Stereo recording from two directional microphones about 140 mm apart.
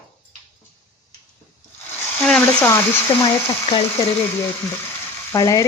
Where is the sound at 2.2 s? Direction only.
5° left (ahead or behind).